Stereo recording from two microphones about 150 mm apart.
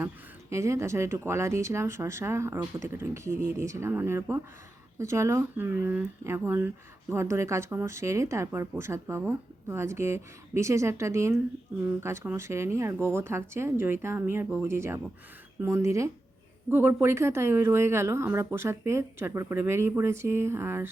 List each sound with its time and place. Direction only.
0.5 s a woman's voice: 20° right (ahead or behind)